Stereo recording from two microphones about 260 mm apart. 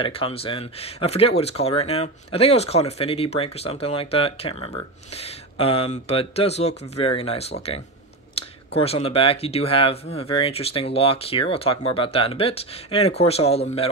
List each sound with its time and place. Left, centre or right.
0.0 s speech: left